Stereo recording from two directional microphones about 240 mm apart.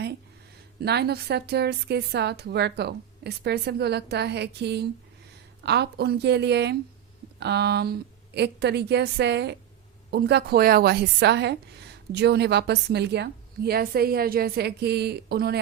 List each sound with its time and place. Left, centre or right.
0.8 s a woman's voice: right